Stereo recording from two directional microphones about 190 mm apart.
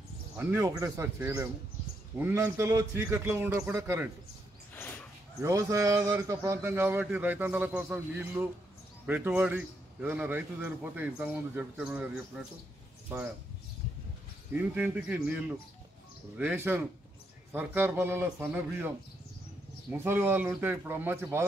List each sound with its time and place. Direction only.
0.4 s a man's voice: 10° right (ahead or behind)
4.7 s a sound: 10° left (ahead or behind)
5.4 s a man's voice: 15° right (ahead or behind)
14.5 s a man's voice: 10° right (ahead or behind)
19.9 s a man's voice: 10° right (ahead or behind)